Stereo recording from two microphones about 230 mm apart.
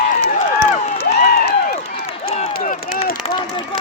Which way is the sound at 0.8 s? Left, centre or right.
Left.